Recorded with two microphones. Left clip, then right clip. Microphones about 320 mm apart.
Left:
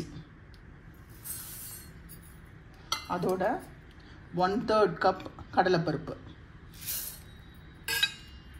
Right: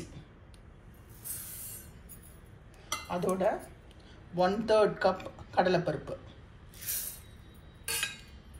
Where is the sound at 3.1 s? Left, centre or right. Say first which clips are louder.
Even; left.